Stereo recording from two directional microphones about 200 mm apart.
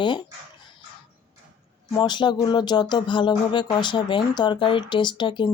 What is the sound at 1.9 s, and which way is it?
Speech, 20° left (ahead or behind).